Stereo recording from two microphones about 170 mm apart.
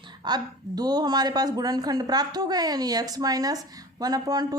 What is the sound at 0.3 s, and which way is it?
Speech, 25° right (ahead or behind).